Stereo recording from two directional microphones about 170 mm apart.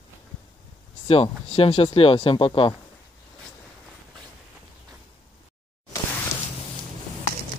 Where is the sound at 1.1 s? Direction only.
35° left (ahead or behind).